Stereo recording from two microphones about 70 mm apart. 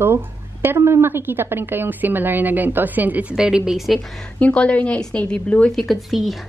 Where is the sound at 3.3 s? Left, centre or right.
Centre.